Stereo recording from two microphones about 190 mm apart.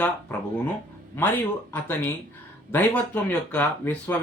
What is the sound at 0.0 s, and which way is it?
Speech, 10° left (ahead or behind).